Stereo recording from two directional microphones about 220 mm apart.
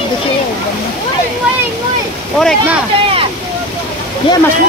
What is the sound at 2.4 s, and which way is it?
Speech, centre (ahead or behind).